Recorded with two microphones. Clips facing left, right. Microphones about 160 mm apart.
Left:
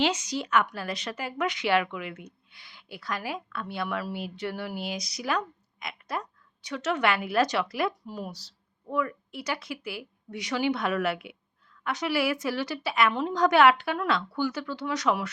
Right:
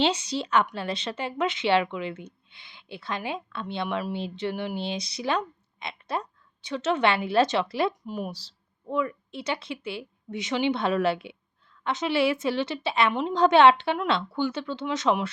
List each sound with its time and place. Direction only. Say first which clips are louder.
0.0 s a woman's voice: right 2 dB; 30° right (ahead or behind)
8.3 s a woman's voice: right 3 dB; 30° right (ahead or behind)